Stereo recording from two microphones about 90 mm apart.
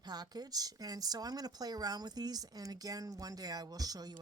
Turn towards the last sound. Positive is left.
turn(degrees=-45)  # may be behind; listen again after turning